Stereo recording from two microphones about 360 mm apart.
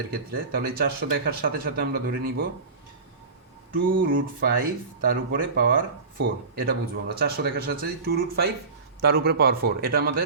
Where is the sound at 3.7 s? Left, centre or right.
Right.